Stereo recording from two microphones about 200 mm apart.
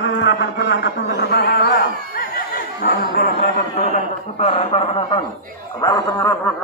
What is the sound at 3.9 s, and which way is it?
A man's voice, 35° left (ahead or behind).